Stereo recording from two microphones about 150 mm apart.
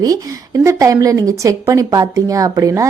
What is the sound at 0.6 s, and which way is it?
Speech, 20° right (ahead or behind).